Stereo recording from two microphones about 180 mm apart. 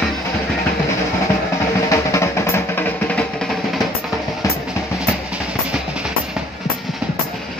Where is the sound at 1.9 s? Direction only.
15° left (ahead or behind).